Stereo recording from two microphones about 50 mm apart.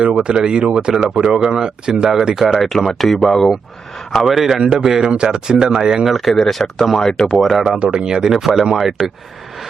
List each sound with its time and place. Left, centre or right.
0.0 s speech: centre
2.6 s speech: centre
4.5 s speech: centre
6.1 s speech: centre
7.1 s speech: centre
7.8 s speech: centre